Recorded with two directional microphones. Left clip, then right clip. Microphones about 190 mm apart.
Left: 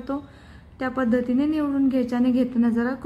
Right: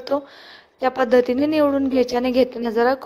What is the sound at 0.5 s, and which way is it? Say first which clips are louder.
A woman's voice: right 7 dB; 35° right (ahead or behind).